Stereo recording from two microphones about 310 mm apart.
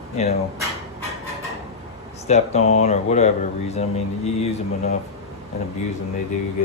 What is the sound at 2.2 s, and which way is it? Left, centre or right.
Speech, left.